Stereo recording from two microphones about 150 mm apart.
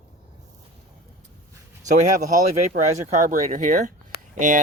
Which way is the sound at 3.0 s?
60° right (ahead or behind).